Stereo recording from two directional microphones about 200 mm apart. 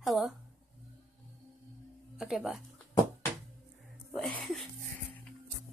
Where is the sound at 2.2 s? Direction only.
Centre (ahead or behind).